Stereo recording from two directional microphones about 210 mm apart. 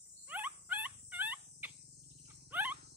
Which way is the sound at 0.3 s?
10° right (ahead or behind).